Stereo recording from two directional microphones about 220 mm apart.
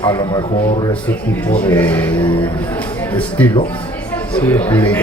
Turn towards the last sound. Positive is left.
turn(degrees=10)  # may be behind; listen again after turning